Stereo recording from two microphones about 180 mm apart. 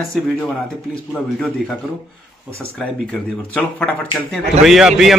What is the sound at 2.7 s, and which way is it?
A man's voice, 5° left (ahead or behind).